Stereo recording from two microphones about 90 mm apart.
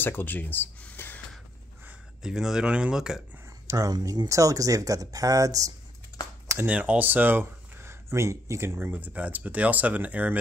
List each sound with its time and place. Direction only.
0.0 s speech: 20° left (ahead or behind)
2.2 s speech: 5° right (ahead or behind)
3.6 s speech: 40° right (ahead or behind)
6.6 s speech: 15° right (ahead or behind)